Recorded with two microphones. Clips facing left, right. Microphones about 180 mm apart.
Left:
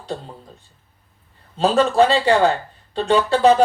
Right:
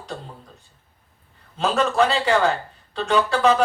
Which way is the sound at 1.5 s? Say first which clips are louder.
Left 4 dB; 30° left (ahead or behind).